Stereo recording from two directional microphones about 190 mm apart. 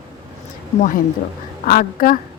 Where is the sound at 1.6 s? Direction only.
50° left (ahead or behind).